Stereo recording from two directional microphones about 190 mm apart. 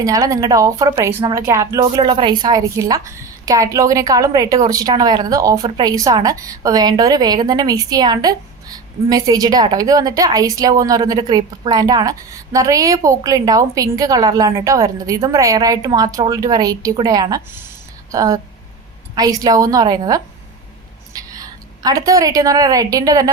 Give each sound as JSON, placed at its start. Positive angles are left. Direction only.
{"t": 0.0, "sound": "a woman's voice", "side_deg": -15}
{"t": 21.1, "sound": "a sound", "side_deg": -20}
{"t": 21.8, "sound": "a woman's voice", "side_deg": -20}